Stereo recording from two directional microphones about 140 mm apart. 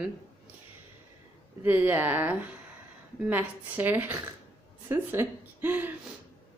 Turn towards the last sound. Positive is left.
turn(degrees=-15)  # may be behind; listen again after turning